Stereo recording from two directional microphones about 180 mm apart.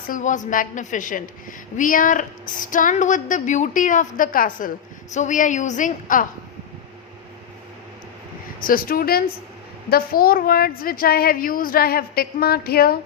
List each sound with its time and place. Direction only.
0.1 s a woman's voice: 45° left (ahead or behind)
8.6 s a woman's voice: 50° left (ahead or behind)